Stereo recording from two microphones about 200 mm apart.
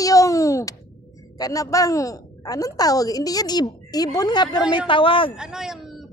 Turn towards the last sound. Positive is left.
turn(degrees=0)  # may be behind; listen again after turning